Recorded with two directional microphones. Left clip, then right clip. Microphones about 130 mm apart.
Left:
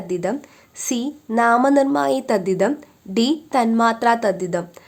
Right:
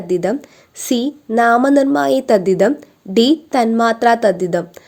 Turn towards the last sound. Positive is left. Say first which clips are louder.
# right 6 dB
turn(degrees=-25)  # may be behind; listen again after turning